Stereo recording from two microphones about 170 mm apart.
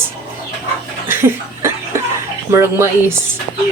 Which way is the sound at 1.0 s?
15° right (ahead or behind).